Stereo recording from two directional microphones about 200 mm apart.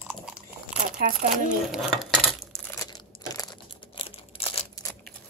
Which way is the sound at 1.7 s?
Centre (ahead or behind).